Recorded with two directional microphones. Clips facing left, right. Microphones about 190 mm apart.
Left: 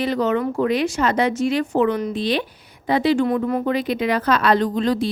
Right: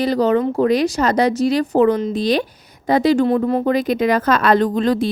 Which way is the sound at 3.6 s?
45° right (ahead or behind).